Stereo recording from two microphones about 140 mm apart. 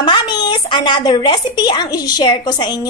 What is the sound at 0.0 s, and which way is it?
A woman's voice, 30° left (ahead or behind).